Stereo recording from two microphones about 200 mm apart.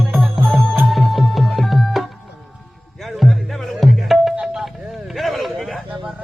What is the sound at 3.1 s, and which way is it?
Music, centre (ahead or behind).